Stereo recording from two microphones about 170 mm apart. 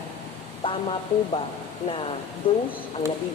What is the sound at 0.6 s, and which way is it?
Speech, 30° left (ahead or behind).